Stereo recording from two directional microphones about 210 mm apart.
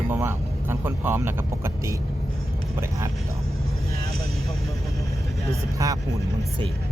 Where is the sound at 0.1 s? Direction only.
10° right (ahead or behind).